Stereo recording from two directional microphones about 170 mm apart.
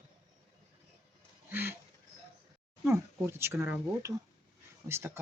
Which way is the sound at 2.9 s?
15° right (ahead or behind).